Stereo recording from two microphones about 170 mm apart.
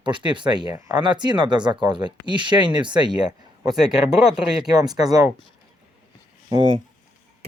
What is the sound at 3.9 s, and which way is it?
Speech, 5° right (ahead or behind).